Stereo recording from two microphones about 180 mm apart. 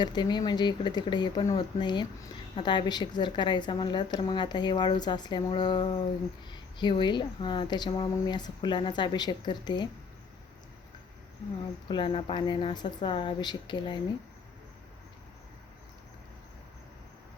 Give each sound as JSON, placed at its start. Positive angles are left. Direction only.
{"t": 0.0, "sound": "a woman's voice", "side_deg": 25}
{"t": 11.9, "sound": "a woman's voice", "side_deg": 25}